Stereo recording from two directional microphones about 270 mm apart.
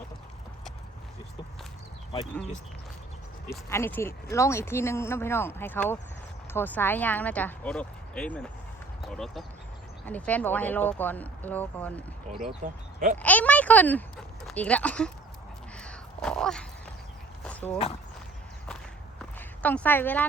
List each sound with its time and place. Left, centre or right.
2.1 s speech: centre
3.7 s speech: centre
12.6 s speech: right
13.1 s speech: centre
15.8 s crow: centre
17.4 s a sound: centre
19.2 s a sound: centre